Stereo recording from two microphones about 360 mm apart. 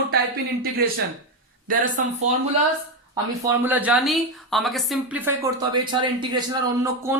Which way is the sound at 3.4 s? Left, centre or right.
Centre.